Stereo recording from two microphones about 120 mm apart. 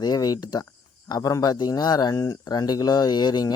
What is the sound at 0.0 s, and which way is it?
Speech, 35° left (ahead or behind).